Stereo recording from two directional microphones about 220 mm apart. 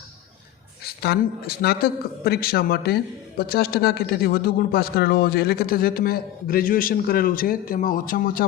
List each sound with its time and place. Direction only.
1.0 s a man's voice: 45° left (ahead or behind)